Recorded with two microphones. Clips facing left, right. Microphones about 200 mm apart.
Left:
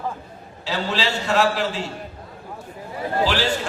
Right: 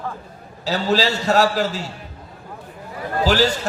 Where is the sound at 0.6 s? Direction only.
40° right (ahead or behind).